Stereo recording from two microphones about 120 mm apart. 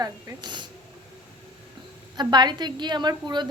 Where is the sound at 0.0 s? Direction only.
35° right (ahead or behind).